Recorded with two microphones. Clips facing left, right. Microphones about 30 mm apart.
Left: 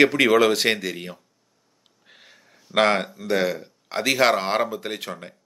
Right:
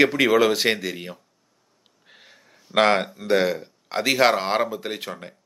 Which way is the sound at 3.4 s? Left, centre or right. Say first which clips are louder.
Right 1 dB; centre.